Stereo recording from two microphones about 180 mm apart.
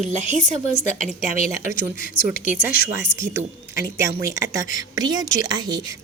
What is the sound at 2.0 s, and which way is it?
Speech, 50° left (ahead or behind).